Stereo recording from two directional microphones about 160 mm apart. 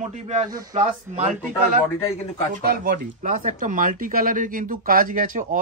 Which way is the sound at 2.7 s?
65° right (ahead or behind).